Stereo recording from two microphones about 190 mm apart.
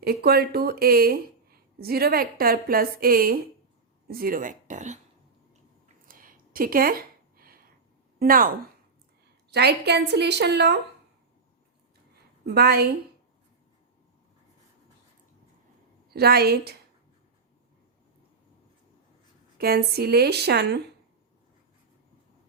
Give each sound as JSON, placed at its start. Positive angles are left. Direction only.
{"t": 0.0, "sound": "speech", "side_deg": -55}
{"t": 6.1, "sound": "a sound", "side_deg": -45}
{"t": 8.2, "sound": "speech", "side_deg": -50}
{"t": 9.5, "sound": "a woman's voice", "side_deg": -60}
{"t": 12.5, "sound": "a woman's voice", "side_deg": -55}
{"t": 16.1, "sound": "a woman's voice", "side_deg": -55}
{"t": 19.5, "sound": "a woman's voice", "side_deg": -55}